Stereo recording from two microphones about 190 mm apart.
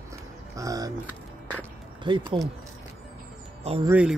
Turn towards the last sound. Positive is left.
turn(degrees=-5)  # may be behind; listen again after turning